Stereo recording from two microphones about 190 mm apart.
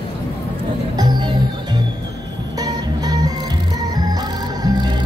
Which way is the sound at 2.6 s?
20° right (ahead or behind).